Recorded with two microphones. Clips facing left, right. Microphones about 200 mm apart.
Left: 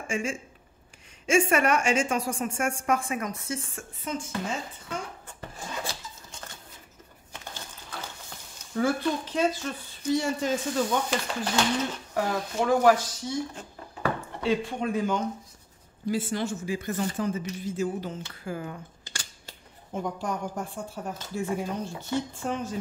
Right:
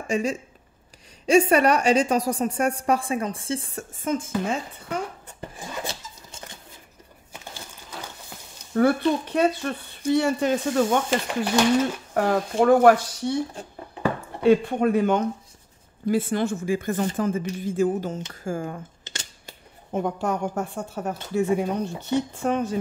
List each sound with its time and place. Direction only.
0.1 s a woman's voice: 40° right (ahead or behind); by 5.0 s 60° right (ahead or behind)
8.7 s speech: 60° right (ahead or behind)
11.2 s speech: 15° right (ahead or behind)
12.1 s speech: 55° right (ahead or behind)
14.4 s speech: 55° right (ahead or behind)
19.0 s scissors: 20° right (ahead or behind)
19.9 s speech: 65° right (ahead or behind)